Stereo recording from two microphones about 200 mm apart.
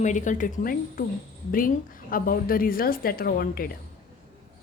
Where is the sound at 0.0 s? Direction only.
40° left (ahead or behind).